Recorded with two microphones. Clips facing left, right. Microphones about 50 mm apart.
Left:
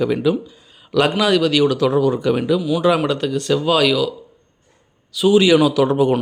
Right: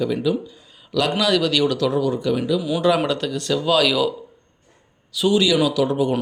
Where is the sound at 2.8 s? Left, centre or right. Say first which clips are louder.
Left 2 dB; centre.